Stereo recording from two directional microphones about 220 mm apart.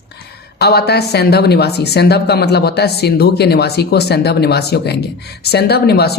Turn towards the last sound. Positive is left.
turn(degrees=45)  # may be behind; listen again after turning